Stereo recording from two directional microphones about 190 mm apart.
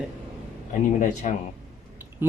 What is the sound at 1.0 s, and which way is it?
Speech, 40° left (ahead or behind).